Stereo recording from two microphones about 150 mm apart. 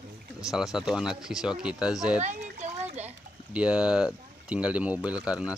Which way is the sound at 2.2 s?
50° right (ahead or behind).